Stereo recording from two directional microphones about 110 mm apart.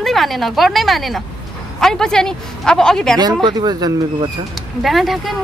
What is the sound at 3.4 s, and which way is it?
Speech, 40° right (ahead or behind).